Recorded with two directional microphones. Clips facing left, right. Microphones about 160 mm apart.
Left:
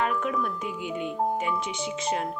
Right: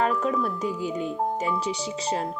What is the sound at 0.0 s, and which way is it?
Speech, 35° right (ahead or behind).